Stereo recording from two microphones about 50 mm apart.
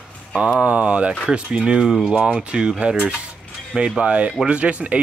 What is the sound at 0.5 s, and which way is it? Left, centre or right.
Speech, right.